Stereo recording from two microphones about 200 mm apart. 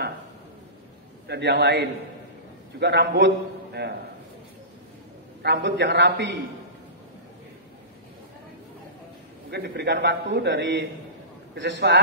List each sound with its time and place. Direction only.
1.2 s a man's voice: 55° right (ahead or behind)
5.4 s a man's voice: 60° right (ahead or behind)
9.5 s a man's voice: 55° right (ahead or behind)